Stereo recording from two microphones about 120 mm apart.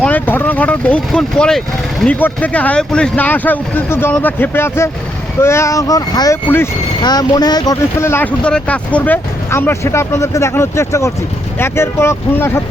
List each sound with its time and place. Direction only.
0.0 s speech: 15° left (ahead or behind)
2.1 s speech: 15° left (ahead or behind); by 7.8 s 35° left (ahead or behind)
7.9 s speech: 20° left (ahead or behind)
8.4 s speech: 10° left (ahead or behind)